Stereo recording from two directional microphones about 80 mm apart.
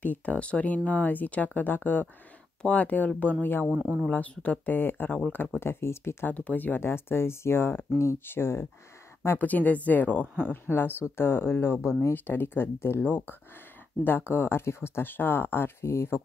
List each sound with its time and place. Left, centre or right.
0.0 s speech: centre
3.7 s speech: centre
4.1 s speech: centre
6.3 s speech: centre
9.4 s speech: left
10.2 s speech: centre
10.5 s speech: left